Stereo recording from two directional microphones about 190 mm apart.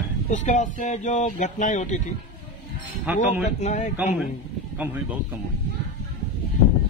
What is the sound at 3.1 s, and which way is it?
Speech, 5° right (ahead or behind).